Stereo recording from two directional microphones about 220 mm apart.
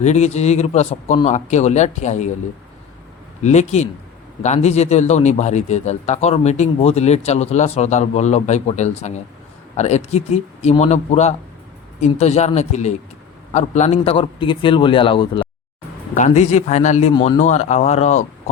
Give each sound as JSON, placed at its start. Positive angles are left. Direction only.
{"t": 0.0, "sound": "speech", "side_deg": 30}
{"t": 3.4, "sound": "a man's voice", "side_deg": 30}